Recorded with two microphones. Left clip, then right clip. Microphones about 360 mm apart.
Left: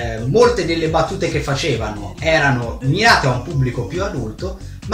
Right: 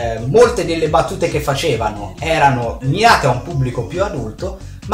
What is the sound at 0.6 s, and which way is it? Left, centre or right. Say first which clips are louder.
Speech: right 2 dB; centre.